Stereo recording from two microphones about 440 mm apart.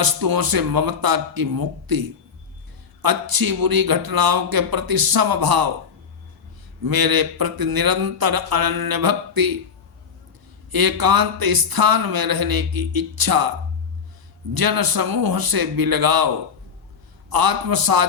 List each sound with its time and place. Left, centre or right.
0.0 s a man's voice: right
6.8 s a man's voice: right
10.7 s a man's voice: right
14.5 s a man's voice: right